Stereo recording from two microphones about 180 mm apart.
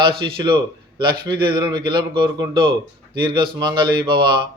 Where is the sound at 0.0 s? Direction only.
30° right (ahead or behind).